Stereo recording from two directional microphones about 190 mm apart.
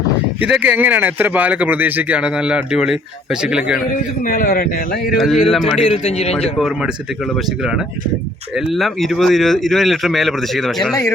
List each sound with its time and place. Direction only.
0.3 s speech: 5° right (ahead or behind)
3.9 s a man's voice: 45° left (ahead or behind)
5.1 s speech: centre (ahead or behind)
5.8 s speech: 35° left (ahead or behind)
6.6 s speech: centre (ahead or behind)
8.5 s speech: centre (ahead or behind)